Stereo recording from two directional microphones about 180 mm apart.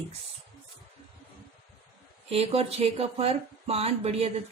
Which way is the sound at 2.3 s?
35° right (ahead or behind).